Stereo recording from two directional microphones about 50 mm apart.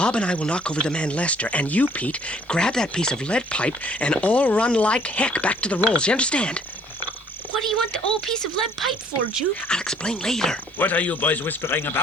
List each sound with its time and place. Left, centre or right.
0.0 s speech: left
7.6 s speech: centre
9.6 s speech: centre
10.8 s a man's voice: left
11.6 s speech: left